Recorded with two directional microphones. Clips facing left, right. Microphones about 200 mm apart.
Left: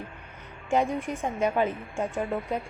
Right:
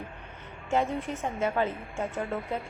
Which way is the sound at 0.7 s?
15° left (ahead or behind).